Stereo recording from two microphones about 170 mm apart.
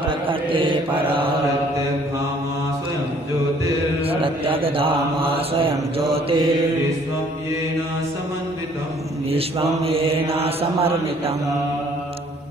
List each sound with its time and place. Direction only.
0.3 s mantra: 30° right (ahead or behind)
4.1 s mantra: 30° right (ahead or behind)
9.8 s mantra: 35° right (ahead or behind)